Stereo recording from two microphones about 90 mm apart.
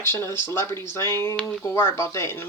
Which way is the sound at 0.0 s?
25° left (ahead or behind).